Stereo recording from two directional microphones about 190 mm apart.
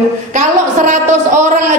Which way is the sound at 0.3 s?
40° right (ahead or behind).